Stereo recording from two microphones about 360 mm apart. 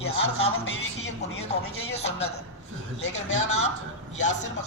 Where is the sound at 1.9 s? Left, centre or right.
Centre.